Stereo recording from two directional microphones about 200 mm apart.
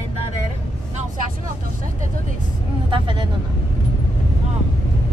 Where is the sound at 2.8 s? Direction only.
25° right (ahead or behind).